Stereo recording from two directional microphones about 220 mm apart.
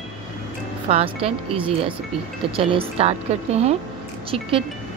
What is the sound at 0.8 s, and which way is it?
Speech, 30° right (ahead or behind).